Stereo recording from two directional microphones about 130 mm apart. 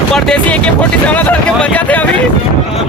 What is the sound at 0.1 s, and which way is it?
Speech, 5° left (ahead or behind).